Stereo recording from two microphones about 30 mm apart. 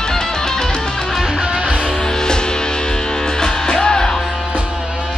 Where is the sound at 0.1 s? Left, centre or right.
Centre.